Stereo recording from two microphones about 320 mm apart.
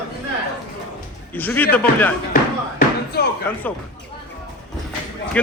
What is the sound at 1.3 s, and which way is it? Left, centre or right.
Speech, centre.